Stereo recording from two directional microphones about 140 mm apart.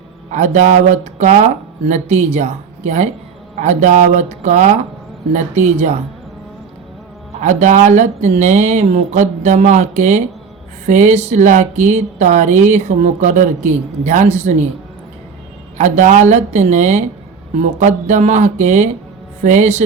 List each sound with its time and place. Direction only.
0.3 s speech: 60° right (ahead or behind)
7.3 s speech: 60° right (ahead or behind)
15.8 s speech: 60° right (ahead or behind)